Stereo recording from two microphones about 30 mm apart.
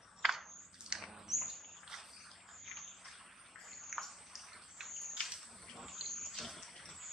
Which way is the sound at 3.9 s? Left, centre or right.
Centre.